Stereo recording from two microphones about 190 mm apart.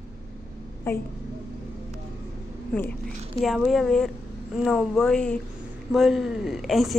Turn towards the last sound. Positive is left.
turn(degrees=0)  # may be behind; listen again after turning